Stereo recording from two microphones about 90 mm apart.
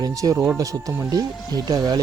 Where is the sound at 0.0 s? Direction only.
40° right (ahead or behind).